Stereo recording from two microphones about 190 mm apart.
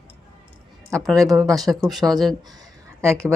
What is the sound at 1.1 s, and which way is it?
Speech, 15° right (ahead or behind).